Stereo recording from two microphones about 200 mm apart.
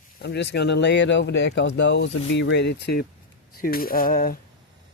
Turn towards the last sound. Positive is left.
turn(degrees=45)  # may be behind; listen again after turning